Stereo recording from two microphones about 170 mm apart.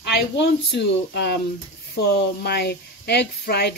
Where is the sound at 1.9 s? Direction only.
70° left (ahead or behind).